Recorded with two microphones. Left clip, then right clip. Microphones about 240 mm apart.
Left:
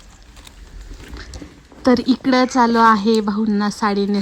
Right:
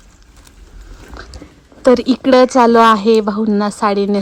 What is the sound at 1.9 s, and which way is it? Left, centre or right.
Speech, centre.